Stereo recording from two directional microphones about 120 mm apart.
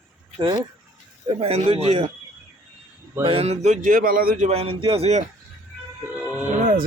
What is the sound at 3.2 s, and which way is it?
Speech, 55° right (ahead or behind).